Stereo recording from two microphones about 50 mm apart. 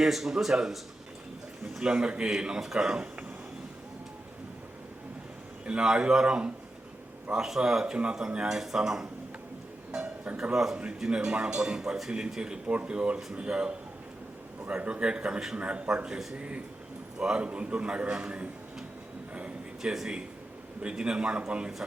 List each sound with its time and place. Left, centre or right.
0.0 s a man's voice: centre
1.9 s a man's voice: right
5.6 s a man's voice: centre
9.9 s music: right
10.5 s a man's voice: centre
14.8 s a man's voice: right
17.2 s a man's voice: right
19.3 s a sound: right
19.8 s a man's voice: centre